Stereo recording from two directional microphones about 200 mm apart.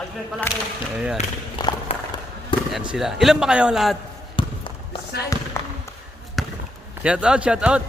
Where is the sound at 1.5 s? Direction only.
25° left (ahead or behind).